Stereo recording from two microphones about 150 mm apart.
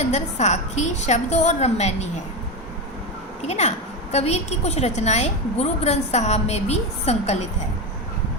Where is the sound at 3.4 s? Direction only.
45° left (ahead or behind).